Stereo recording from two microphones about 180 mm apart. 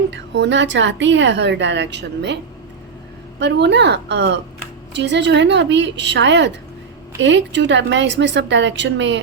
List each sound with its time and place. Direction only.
0.1 s a woman's voice: 75° right (ahead or behind)